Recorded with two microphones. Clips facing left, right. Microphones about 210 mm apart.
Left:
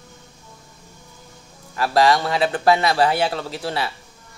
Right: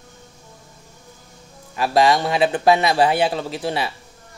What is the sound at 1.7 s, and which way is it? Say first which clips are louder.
Speech: right 1 dB; 20° right (ahead or behind).